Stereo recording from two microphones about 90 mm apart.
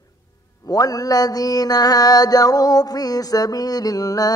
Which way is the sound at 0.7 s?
45° left (ahead or behind).